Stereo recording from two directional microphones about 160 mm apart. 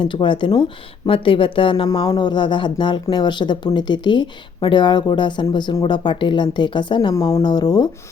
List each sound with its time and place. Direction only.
0.0 s speech: 30° left (ahead or behind)